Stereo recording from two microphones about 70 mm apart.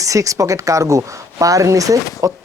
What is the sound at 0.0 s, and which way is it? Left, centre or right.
Speech, right.